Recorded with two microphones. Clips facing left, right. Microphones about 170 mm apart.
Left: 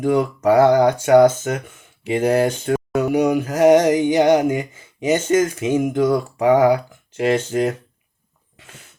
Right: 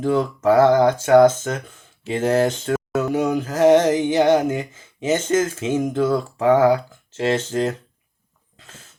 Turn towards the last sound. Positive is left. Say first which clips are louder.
# left 2 dB
turn(degrees=10)  # may be behind; listen again after turning